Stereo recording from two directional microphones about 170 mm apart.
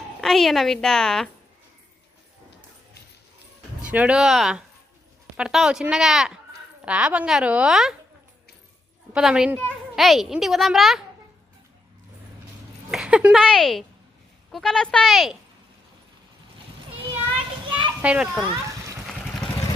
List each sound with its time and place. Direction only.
0.2 s a woman's voice: centre (ahead or behind)
3.8 s a woman's voice: 10° right (ahead or behind)
9.1 s a woman's voice: 5° right (ahead or behind)
12.9 s a woman's voice: 5° right (ahead or behind)
17.7 s children playing: 25° right (ahead or behind)
18.0 s a woman's voice: 5° right (ahead or behind)
19.0 s vehicle: centre (ahead or behind)